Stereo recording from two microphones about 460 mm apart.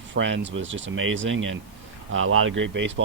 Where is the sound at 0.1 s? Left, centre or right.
Right.